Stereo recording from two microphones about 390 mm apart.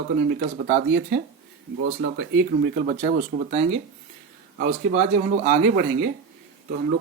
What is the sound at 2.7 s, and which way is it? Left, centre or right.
Speech, centre.